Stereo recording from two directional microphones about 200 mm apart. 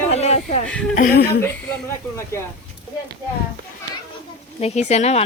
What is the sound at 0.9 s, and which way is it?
Speech, 45° left (ahead or behind).